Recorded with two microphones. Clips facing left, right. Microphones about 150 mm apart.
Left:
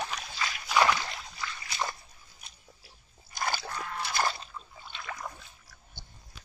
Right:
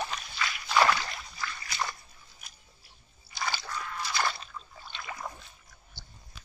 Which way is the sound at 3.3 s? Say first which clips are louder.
Left 2 dB; 50° left (ahead or behind).